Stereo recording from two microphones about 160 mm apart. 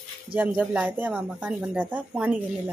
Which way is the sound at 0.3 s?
10° right (ahead or behind).